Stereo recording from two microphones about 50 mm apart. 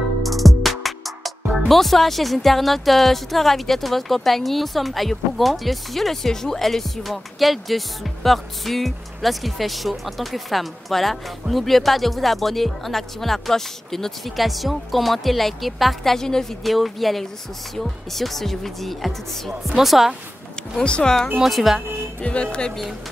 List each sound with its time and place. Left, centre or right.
0.2 s music: centre
1.7 s a woman's voice: centre
20.8 s speech: centre
21.4 s a woman's voice: centre
22.2 s speech: left